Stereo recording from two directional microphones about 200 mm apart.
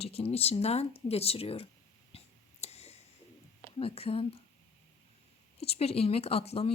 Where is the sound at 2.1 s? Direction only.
30° left (ahead or behind).